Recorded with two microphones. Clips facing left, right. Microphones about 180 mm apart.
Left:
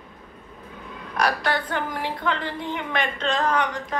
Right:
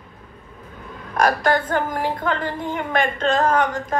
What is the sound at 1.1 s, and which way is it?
A woman's voice, 45° right (ahead or behind).